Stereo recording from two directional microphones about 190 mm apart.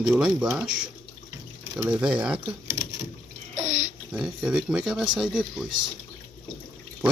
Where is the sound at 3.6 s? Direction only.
20° left (ahead or behind).